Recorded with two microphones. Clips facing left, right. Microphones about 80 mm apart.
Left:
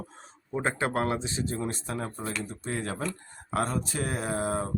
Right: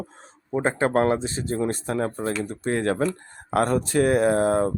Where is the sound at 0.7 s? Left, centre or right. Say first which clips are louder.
Right 7 dB; right.